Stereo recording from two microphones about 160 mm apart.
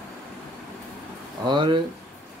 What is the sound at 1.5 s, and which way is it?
Speech, 30° right (ahead or behind).